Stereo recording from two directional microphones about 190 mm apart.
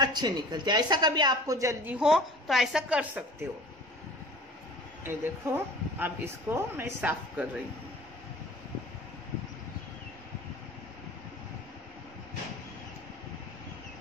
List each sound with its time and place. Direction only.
0.0 s a woman's voice: 20° right (ahead or behind)
2.0 s a woman's voice: centre (ahead or behind)
5.0 s speech: 10° right (ahead or behind)